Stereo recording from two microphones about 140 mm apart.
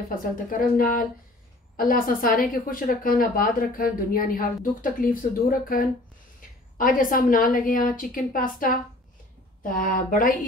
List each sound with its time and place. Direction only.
0.1 s a woman's voice: 75° left (ahead or behind)
6.8 s a woman's voice: 75° left (ahead or behind)